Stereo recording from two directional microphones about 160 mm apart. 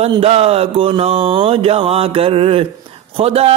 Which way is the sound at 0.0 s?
40° right (ahead or behind).